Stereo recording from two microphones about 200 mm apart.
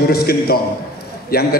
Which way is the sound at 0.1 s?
50° left (ahead or behind).